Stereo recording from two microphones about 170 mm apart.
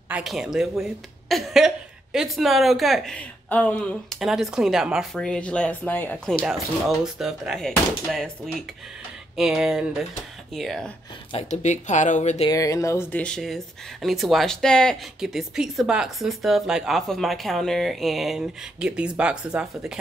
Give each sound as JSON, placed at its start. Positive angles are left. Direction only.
{"t": 0.1, "sound": "speech", "side_deg": 0}
{"t": 6.4, "sound": "speech", "side_deg": 0}
{"t": 11.3, "sound": "speech", "side_deg": 40}
{"t": 12.4, "sound": "speech", "side_deg": 20}